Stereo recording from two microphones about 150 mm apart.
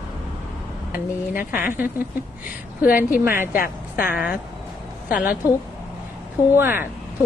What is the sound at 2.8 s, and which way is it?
A woman's voice, 70° left (ahead or behind).